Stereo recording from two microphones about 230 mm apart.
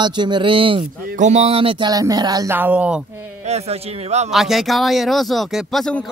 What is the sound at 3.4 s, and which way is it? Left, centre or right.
Speech, right.